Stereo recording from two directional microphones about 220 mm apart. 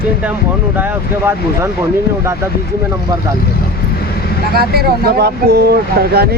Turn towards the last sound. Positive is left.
turn(degrees=-45)  # may be behind; listen again after turning